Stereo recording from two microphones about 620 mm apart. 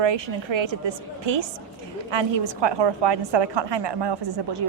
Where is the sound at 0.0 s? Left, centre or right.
Right.